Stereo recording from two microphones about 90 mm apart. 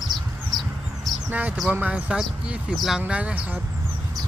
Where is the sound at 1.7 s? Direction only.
15° right (ahead or behind).